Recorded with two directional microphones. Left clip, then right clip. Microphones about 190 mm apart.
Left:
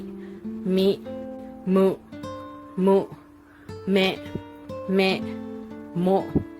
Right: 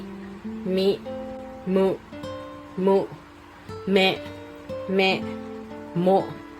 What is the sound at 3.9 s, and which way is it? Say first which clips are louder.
Speech: right 2 dB; 30° left (ahead or behind).